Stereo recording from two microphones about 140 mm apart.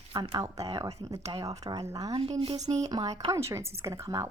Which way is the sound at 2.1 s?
45° right (ahead or behind).